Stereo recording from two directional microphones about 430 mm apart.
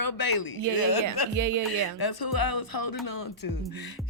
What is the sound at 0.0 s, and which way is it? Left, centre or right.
Speech, left.